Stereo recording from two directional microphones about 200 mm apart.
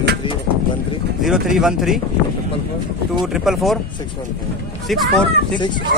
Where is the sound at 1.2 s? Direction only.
Centre (ahead or behind).